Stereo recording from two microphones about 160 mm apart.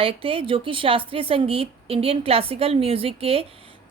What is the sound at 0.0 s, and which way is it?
Speech, 35° right (ahead or behind).